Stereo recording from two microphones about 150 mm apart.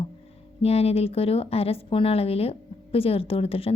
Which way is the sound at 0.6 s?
45° left (ahead or behind).